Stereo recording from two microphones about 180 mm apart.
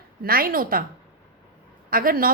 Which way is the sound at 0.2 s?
55° right (ahead or behind).